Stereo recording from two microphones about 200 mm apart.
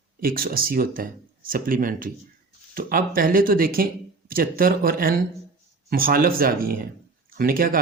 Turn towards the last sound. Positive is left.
turn(degrees=-45)  # may be behind; listen again after turning